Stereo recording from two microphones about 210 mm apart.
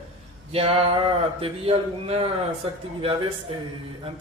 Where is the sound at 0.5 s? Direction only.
30° right (ahead or behind).